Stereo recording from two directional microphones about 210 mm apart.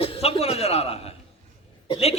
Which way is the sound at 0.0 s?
30° left (ahead or behind).